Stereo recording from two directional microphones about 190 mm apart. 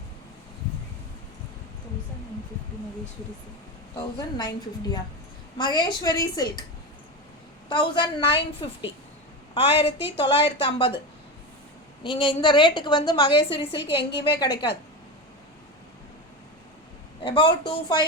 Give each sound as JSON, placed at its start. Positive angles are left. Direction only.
{"t": 3.9, "sound": "a woman's voice", "side_deg": 20}
{"t": 7.7, "sound": "a woman's voice", "side_deg": 25}
{"t": 12.0, "sound": "a woman's voice", "side_deg": 25}
{"t": 17.2, "sound": "a woman's voice", "side_deg": 25}